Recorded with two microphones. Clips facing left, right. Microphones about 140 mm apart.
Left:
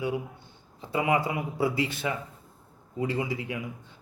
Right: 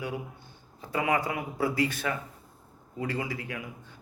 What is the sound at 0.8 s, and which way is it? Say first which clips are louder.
Speech: left 2 dB; 25° left (ahead or behind).